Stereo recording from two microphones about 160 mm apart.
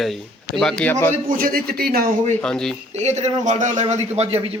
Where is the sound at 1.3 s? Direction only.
65° right (ahead or behind).